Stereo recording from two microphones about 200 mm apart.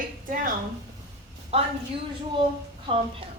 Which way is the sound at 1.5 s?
30° right (ahead or behind).